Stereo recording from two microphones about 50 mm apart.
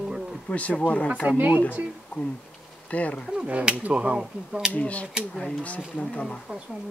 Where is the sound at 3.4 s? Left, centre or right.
Right.